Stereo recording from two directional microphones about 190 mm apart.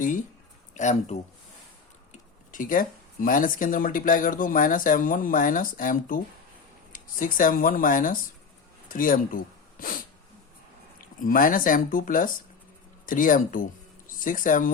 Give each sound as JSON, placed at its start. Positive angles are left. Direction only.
{"t": 0.8, "sound": "speech", "side_deg": 40}
{"t": 2.1, "sound": "speech", "side_deg": 45}
{"t": 11.2, "sound": "speech", "side_deg": 45}